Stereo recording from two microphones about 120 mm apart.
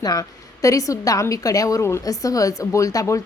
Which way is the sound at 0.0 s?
30° left (ahead or behind).